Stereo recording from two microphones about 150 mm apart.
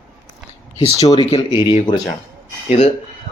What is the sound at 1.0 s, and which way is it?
Speech, 40° left (ahead or behind).